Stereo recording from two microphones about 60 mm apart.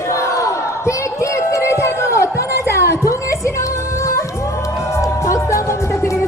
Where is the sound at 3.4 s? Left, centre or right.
Left.